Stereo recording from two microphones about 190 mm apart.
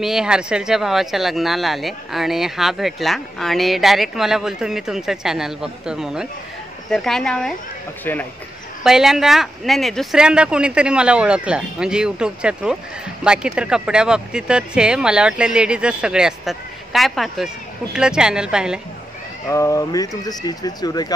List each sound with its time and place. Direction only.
0.0 s a man's voice: 5° right (ahead or behind)
8.8 s speech: centre (ahead or behind)
19.4 s speech: 15° left (ahead or behind)